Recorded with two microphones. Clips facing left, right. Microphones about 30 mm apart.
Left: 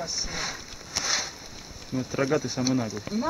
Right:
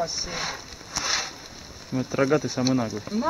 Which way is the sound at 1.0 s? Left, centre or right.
Centre.